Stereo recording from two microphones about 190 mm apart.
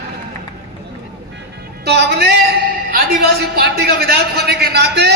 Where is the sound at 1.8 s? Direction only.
60° right (ahead or behind).